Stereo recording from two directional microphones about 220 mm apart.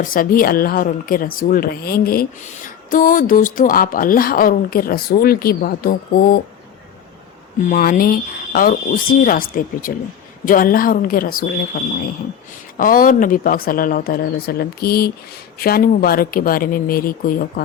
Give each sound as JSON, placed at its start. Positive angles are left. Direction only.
{"t": 0.0, "sound": "a woman's voice", "side_deg": 40}
{"t": 7.7, "sound": "a woman's voice", "side_deg": 40}